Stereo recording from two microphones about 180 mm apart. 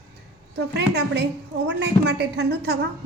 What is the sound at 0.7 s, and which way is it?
A woman's voice, 70° right (ahead or behind).